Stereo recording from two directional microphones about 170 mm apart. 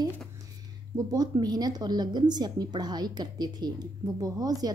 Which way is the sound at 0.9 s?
25° right (ahead or behind).